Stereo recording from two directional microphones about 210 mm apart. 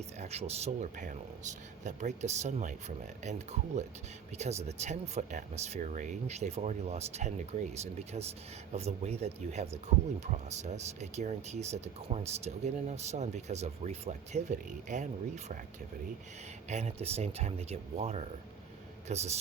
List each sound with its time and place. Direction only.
0.2 s speech: 30° right (ahead or behind)
16.6 s speech: 30° right (ahead or behind)